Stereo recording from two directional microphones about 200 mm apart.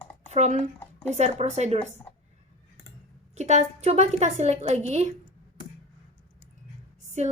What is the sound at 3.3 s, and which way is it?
A woman's voice, 35° right (ahead or behind).